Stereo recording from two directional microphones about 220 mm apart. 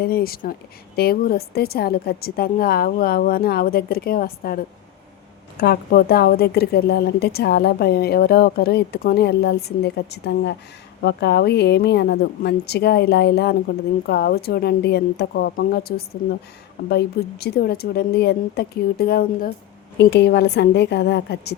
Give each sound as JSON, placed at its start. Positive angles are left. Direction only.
{"t": 0.0, "sound": "a woman's voice", "side_deg": 45}